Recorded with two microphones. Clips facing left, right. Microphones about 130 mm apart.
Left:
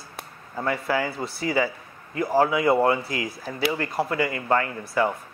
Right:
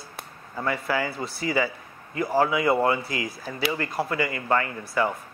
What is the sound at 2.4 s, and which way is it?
Speech, 25° left (ahead or behind).